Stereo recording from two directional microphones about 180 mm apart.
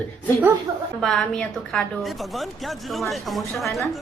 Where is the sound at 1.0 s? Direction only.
5° left (ahead or behind).